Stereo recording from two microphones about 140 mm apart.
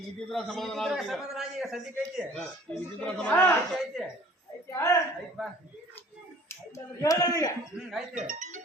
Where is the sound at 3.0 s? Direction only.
10° left (ahead or behind).